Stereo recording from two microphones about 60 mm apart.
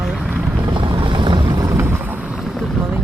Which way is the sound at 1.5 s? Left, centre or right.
Right.